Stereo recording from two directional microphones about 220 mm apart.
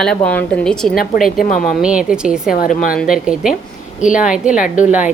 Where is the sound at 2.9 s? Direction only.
5° right (ahead or behind).